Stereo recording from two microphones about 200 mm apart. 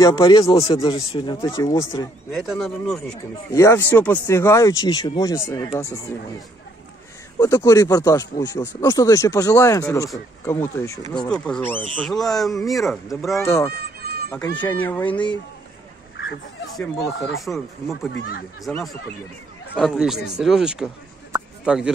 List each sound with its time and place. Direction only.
0.0 s speech: 20° left (ahead or behind)
2.4 s speech: centre (ahead or behind)
3.5 s speech: 15° left (ahead or behind)
7.3 s speech: 15° left (ahead or behind); by 13.4 s centre (ahead or behind)
13.4 s speech: 15° left (ahead or behind)
13.7 s goat: 50° right (ahead or behind)
14.5 s speech: 10° left (ahead or behind)
16.7 s speech: centre (ahead or behind)